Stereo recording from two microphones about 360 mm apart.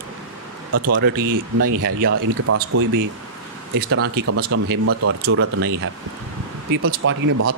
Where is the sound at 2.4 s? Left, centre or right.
Right.